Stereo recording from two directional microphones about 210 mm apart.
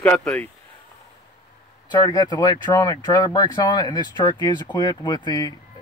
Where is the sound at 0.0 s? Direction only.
5° left (ahead or behind).